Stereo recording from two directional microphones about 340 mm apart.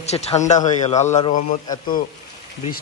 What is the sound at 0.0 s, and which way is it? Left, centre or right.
Speech, centre.